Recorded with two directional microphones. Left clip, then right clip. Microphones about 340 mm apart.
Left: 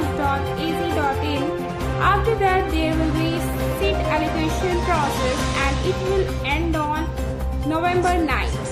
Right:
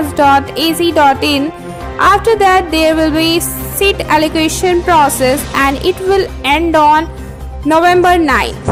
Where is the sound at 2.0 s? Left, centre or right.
Right.